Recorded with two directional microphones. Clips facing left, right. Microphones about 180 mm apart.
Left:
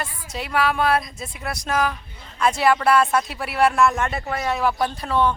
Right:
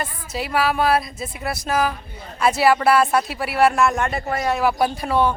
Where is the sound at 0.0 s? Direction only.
5° right (ahead or behind).